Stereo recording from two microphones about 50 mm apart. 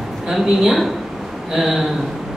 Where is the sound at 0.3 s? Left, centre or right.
Centre.